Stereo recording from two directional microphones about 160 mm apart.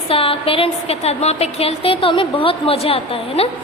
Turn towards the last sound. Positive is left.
turn(degrees=35)  # may be behind; listen again after turning